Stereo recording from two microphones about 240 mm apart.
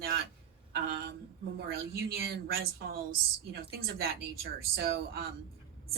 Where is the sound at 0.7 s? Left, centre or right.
Right.